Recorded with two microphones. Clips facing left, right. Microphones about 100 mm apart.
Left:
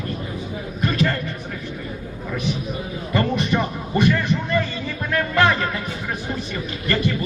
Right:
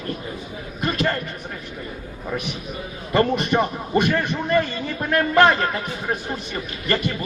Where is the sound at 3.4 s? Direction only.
20° right (ahead or behind).